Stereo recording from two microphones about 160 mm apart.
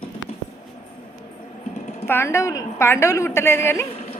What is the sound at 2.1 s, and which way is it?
A woman's voice, 15° left (ahead or behind).